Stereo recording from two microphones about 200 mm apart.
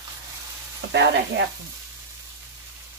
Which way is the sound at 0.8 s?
60° right (ahead or behind).